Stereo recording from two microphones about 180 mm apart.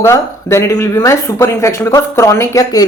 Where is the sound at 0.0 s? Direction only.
15° left (ahead or behind).